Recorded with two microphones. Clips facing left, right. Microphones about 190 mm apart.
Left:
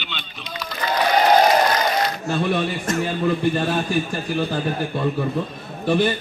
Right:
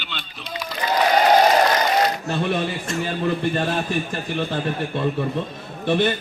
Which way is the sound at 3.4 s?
Centre (ahead or behind).